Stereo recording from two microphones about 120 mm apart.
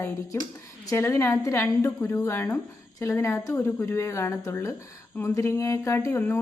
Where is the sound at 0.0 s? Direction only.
25° left (ahead or behind).